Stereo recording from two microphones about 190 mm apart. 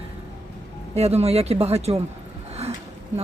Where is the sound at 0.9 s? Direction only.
35° right (ahead or behind).